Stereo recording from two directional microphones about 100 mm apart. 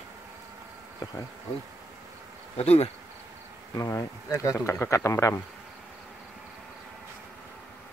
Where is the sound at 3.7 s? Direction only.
35° left (ahead or behind).